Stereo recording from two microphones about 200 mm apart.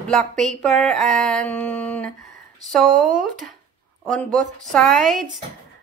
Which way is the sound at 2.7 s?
Centre (ahead or behind).